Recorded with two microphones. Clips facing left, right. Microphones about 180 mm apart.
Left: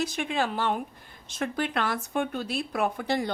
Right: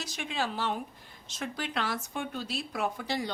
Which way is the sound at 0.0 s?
55° left (ahead or behind).